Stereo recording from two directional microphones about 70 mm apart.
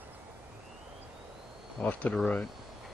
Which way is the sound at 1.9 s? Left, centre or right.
Centre.